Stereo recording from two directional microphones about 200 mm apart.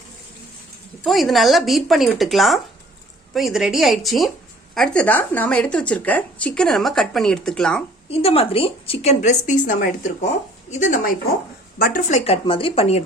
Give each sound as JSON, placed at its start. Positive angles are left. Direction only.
{"t": 1.0, "sound": "speech", "side_deg": 0}
{"t": 8.1, "sound": "a woman's voice", "side_deg": 30}